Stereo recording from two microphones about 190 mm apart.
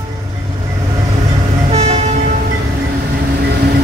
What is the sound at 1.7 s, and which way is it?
Vehicle, 35° right (ahead or behind).